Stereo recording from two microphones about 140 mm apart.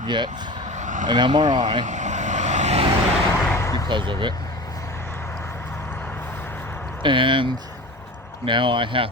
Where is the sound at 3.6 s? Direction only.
25° left (ahead or behind).